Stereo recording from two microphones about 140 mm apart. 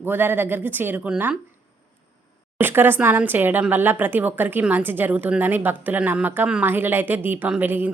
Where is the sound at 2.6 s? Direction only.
15° right (ahead or behind).